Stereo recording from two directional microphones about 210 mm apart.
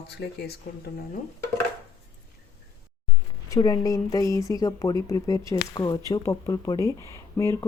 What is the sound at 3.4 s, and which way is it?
Speech, 15° left (ahead or behind).